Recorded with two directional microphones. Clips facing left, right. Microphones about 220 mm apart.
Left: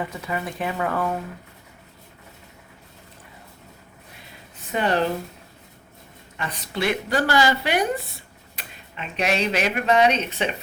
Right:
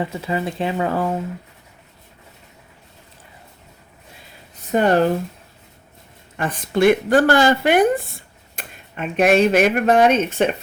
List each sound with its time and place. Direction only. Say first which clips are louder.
0.0 s speech: right 5 dB; 25° right (ahead or behind)
4.7 s a woman's voice: right 6 dB; 45° right (ahead or behind)
6.3 s a woman's voice: right 8 dB; 50° right (ahead or behind)